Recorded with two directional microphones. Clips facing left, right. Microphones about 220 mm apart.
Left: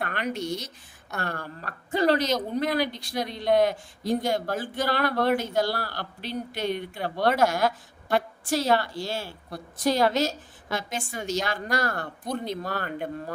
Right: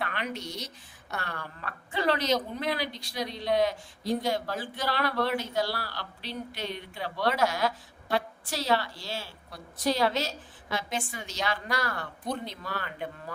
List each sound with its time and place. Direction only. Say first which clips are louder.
0.0 s a woman's voice: left 5 dB; 45° left (ahead or behind)